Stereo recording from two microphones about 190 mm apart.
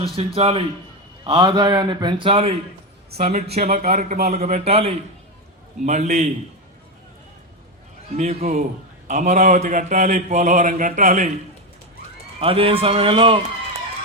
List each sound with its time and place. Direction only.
0.0 s a man's voice: 30° right (ahead or behind)
3.7 s a man's voice: 45° right (ahead or behind)
8.1 s a man's voice: 35° right (ahead or behind)
12.4 s a man's voice: 30° right (ahead or behind)